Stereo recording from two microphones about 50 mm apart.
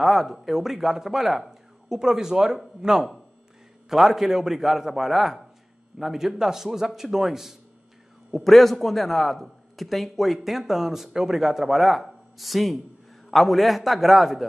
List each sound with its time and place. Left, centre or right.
0.0 s a man's voice: centre